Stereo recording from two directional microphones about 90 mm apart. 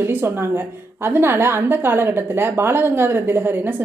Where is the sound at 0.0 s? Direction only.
25° right (ahead or behind).